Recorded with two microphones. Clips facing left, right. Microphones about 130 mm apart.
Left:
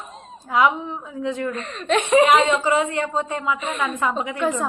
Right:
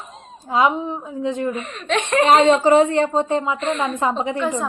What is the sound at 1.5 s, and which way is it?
Speech, 5° right (ahead or behind).